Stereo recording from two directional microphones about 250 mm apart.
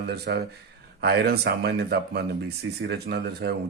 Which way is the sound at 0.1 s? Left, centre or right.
Right.